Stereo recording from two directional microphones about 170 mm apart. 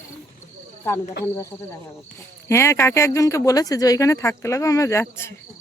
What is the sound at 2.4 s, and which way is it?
Speech, 15° left (ahead or behind).